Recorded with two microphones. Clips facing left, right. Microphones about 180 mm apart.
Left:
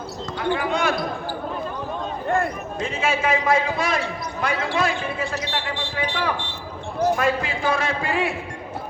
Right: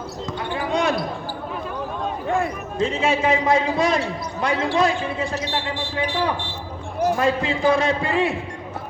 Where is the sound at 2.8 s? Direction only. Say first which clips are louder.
Right 4 dB; 35° right (ahead or behind).